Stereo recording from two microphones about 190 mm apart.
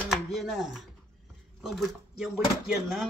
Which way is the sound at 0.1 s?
Centre (ahead or behind).